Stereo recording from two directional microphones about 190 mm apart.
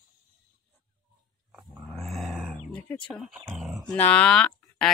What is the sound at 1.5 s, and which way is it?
Dog, centre (ahead or behind).